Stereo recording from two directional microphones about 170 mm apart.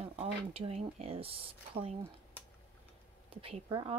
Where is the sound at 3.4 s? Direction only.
30° right (ahead or behind).